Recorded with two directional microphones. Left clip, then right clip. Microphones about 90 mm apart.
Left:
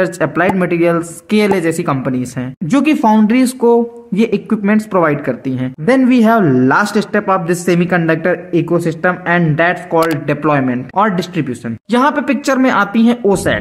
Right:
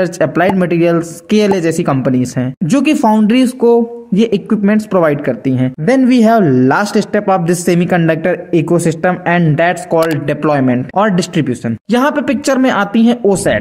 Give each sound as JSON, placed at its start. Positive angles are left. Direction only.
{"t": 0.0, "sound": "speech", "side_deg": -35}
{"t": 3.6, "sound": "speech", "side_deg": -25}
{"t": 4.3, "sound": "speech", "side_deg": -40}
{"t": 9.1, "sound": "speech", "side_deg": -35}
{"t": 9.8, "sound": "speech", "side_deg": 0}
{"t": 10.2, "sound": "speech", "side_deg": -45}
{"t": 11.0, "sound": "a man's voice", "side_deg": -30}
{"t": 11.3, "sound": "speech", "side_deg": -45}
{"t": 11.9, "sound": "speech", "side_deg": -30}
{"t": 13.3, "sound": "speech", "side_deg": -40}